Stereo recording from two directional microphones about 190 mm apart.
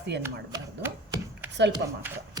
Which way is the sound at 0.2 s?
15° right (ahead or behind).